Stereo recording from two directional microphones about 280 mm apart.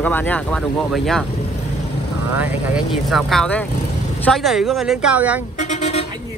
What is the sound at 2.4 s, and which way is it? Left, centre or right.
Speech, centre.